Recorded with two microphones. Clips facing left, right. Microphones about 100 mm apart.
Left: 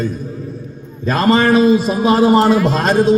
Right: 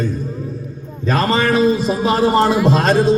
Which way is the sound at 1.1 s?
15° left (ahead or behind).